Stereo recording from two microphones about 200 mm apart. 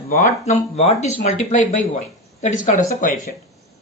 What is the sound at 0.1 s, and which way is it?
Speech, 35° left (ahead or behind).